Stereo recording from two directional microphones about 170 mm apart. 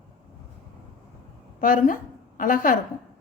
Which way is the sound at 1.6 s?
50° left (ahead or behind).